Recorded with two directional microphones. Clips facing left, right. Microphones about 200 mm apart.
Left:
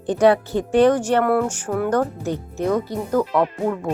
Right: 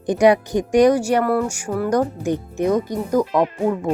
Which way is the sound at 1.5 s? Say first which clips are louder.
Right 1 dB; 5° right (ahead or behind).